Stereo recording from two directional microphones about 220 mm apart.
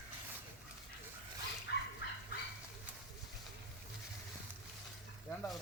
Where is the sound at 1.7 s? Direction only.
50° left (ahead or behind).